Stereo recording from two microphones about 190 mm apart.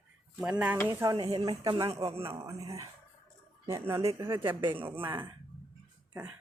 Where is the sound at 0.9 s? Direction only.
15° right (ahead or behind).